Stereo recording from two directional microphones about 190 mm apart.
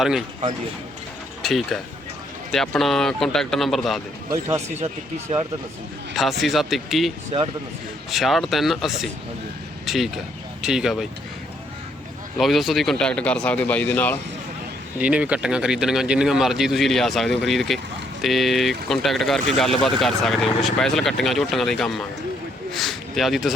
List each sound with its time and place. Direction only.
1.4 s speech: centre (ahead or behind)
6.1 s speech: centre (ahead or behind)
7.3 s speech: 30° right (ahead or behind)
8.1 s speech: centre (ahead or behind)
12.4 s speech: centre (ahead or behind)
14.9 s speech: 5° right (ahead or behind)